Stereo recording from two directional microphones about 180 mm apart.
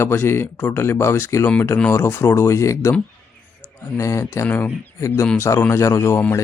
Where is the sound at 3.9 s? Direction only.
15° left (ahead or behind).